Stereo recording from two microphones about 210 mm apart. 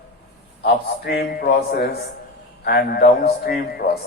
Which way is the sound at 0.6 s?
50° left (ahead or behind).